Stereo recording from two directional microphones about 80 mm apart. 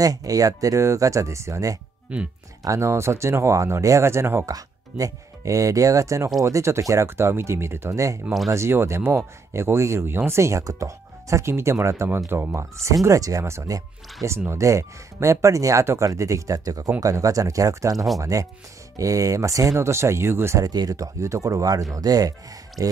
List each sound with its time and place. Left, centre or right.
0.0 s speech: right
2.1 s speech: centre
2.6 s speech: right
4.5 s speech: right
12.8 s speech: right
17.9 s speech: centre
18.2 s speech: right
20.6 s speech: right